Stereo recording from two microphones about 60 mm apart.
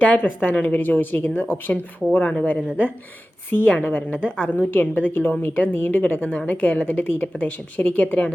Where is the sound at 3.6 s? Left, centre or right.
Left.